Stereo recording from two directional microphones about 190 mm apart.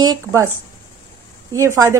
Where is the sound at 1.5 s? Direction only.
15° right (ahead or behind).